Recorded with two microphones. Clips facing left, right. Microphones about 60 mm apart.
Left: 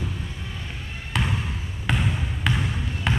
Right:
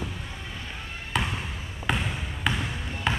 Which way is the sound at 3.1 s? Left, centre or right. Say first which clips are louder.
Left 1 dB; centre.